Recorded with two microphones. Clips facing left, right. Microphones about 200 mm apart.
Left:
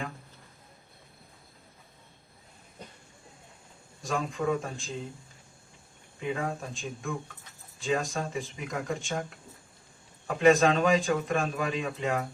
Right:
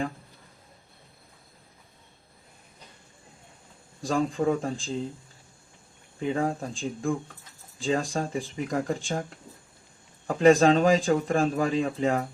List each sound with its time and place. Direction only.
4.0 s speech: 30° right (ahead or behind)
6.1 s speech: 30° right (ahead or behind)
10.2 s speech: 30° right (ahead or behind)